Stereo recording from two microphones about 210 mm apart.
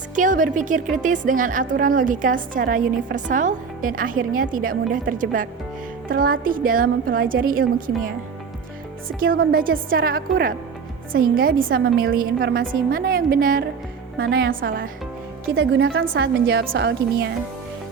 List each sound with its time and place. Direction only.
0.2 s a woman's voice: 40° right (ahead or behind)
15.5 s a woman's voice: 60° right (ahead or behind)